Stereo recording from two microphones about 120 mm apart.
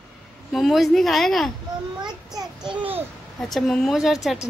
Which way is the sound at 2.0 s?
40° right (ahead or behind).